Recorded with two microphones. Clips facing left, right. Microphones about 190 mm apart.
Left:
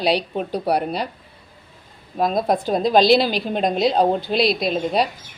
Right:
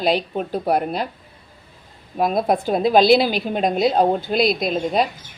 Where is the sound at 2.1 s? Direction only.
5° right (ahead or behind).